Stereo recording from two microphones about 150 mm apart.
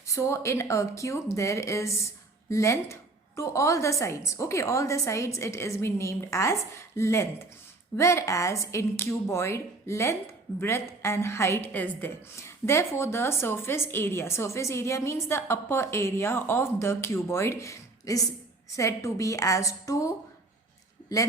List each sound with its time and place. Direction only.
0.1 s a woman's voice: 20° left (ahead or behind)